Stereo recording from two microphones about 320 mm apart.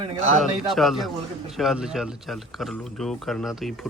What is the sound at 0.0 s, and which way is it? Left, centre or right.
Speech, centre.